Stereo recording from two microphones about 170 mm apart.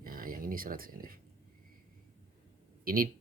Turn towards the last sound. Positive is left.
turn(degrees=-60)  # may be behind; listen again after turning